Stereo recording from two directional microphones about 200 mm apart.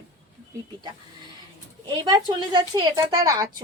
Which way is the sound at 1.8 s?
20° right (ahead or behind).